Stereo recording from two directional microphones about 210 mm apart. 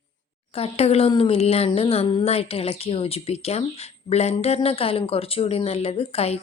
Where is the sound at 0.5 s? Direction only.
30° left (ahead or behind).